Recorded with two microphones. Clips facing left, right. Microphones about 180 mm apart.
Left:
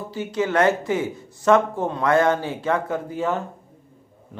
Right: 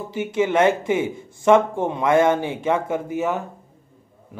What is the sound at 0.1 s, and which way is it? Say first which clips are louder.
Speech: right 3 dB; 20° right (ahead or behind).